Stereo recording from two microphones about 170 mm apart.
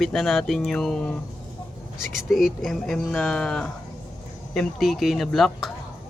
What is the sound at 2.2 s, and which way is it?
Speech, centre (ahead or behind).